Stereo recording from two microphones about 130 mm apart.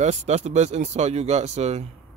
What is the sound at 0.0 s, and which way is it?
Speech, 60° right (ahead or behind).